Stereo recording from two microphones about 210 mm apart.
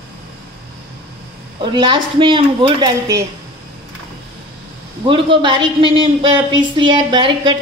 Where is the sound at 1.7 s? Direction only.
20° right (ahead or behind).